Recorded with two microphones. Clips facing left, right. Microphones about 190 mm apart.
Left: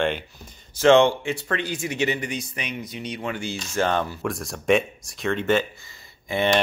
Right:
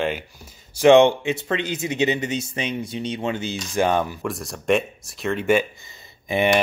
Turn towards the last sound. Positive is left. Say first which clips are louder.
# right 2 dB
turn(degrees=-15)  # may be behind; listen again after turning